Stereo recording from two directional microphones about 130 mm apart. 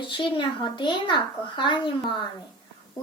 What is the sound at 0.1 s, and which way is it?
A woman's voice, 40° left (ahead or behind).